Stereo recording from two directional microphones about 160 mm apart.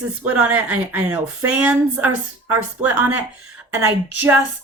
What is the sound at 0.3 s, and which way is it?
A woman's voice, 10° right (ahead or behind).